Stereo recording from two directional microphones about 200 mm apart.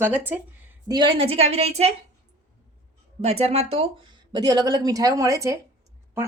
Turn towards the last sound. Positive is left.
turn(degrees=-15)  # may be behind; listen again after turning